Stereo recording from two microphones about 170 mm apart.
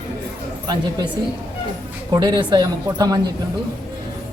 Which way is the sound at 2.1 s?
25° right (ahead or behind).